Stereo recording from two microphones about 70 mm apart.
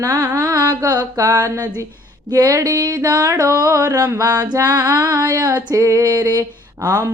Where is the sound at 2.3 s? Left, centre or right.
Right.